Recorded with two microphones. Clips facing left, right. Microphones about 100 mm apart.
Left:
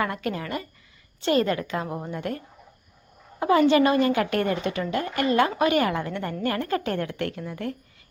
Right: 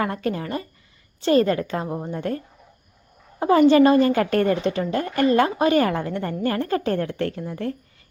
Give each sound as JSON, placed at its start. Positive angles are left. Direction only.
{"t": 0.0, "sound": "a woman's voice", "side_deg": -35}
{"t": 3.7, "sound": "a woman's voice", "side_deg": -35}